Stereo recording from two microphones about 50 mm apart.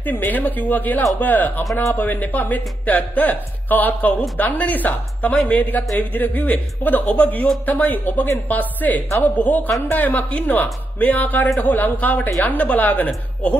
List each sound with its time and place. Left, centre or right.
0.0 s speech: left